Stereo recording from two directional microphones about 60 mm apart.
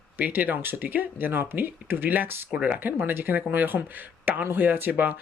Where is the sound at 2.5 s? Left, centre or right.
Right.